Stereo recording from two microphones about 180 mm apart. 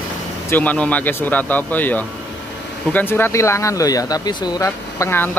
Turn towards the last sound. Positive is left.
turn(degrees=15)  # may be behind; listen again after turning